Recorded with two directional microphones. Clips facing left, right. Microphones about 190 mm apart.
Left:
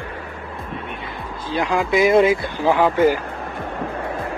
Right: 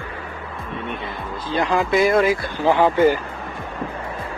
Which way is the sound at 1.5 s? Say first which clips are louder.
Even; 10° left (ahead or behind).